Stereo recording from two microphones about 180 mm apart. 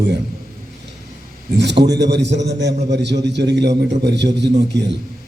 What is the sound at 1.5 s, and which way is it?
A man's voice, 75° right (ahead or behind).